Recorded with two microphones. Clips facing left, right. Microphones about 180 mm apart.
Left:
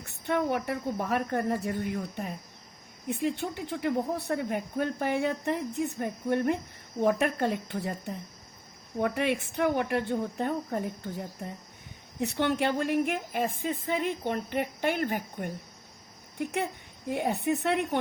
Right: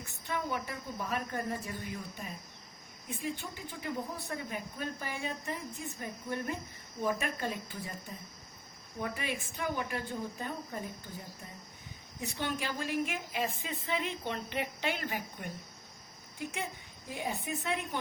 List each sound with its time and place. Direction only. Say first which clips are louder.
0.0 s a woman's voice: left 9 dB; 65° left (ahead or behind)